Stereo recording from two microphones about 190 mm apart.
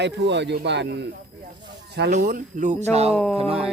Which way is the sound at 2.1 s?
45° right (ahead or behind).